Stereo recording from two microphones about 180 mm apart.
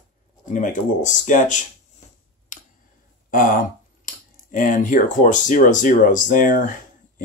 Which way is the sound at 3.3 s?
50° left (ahead or behind).